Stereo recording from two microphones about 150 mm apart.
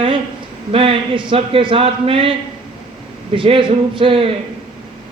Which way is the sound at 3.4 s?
35° right (ahead or behind).